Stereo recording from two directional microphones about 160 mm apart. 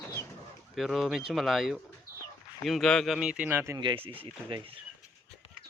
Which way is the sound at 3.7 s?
30° right (ahead or behind).